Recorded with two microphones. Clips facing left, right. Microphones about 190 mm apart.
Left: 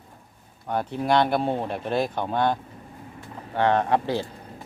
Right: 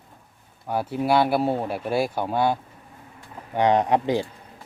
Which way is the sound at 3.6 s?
15° right (ahead or behind).